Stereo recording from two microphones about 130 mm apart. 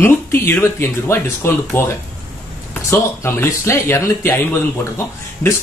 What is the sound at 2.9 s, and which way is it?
Speech, 20° left (ahead or behind).